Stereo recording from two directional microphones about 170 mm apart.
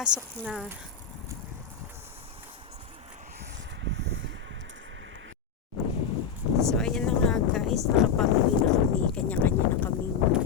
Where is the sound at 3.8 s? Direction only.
90° right.